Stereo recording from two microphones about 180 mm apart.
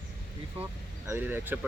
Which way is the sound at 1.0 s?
10° right (ahead or behind).